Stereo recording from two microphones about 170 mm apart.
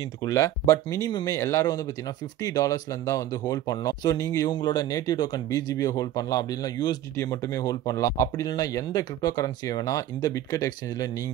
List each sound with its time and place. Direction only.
0.2 s speech: 20° left (ahead or behind)